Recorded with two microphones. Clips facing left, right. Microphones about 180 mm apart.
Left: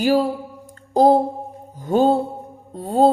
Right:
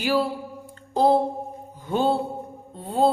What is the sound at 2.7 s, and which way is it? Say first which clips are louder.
Music: left 5 dB; 40° left (ahead or behind).